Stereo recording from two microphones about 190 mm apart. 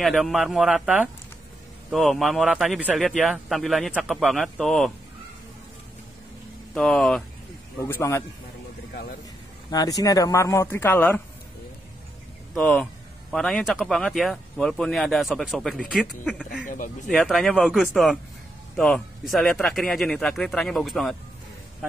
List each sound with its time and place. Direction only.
0.0 s a man's voice: centre (ahead or behind)
6.7 s a man's voice: 5° left (ahead or behind)
7.8 s speech: 15° left (ahead or behind)
9.7 s speech: 20° left (ahead or behind)
12.5 s a man's voice: 5° left (ahead or behind)
16.6 s speech: 45° left (ahead or behind)
17.1 s a man's voice: centre (ahead or behind)